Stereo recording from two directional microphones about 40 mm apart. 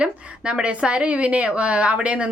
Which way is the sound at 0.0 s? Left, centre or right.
Right.